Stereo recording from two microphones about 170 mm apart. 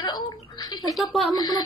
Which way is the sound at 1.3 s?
25° left (ahead or behind).